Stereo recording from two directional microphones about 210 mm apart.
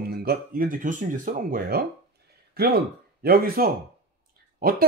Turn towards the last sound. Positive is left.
turn(degrees=-45)  # may be behind; listen again after turning